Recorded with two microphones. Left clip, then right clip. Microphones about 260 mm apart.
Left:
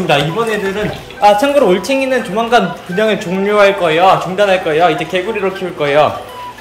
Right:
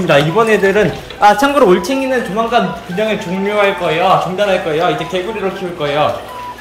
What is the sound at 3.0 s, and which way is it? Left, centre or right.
Speech, centre.